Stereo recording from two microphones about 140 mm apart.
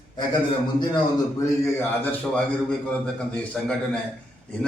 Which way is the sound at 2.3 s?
10° left (ahead or behind).